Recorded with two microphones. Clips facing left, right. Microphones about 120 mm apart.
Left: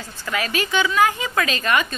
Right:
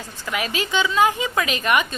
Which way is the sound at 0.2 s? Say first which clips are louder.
Left 1 dB; 20° right (ahead or behind).